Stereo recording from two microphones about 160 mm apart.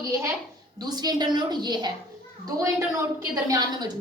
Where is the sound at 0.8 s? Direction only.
25° right (ahead or behind).